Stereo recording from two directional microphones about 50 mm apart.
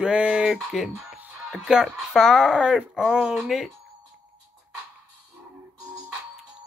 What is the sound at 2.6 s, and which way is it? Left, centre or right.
Speech, centre.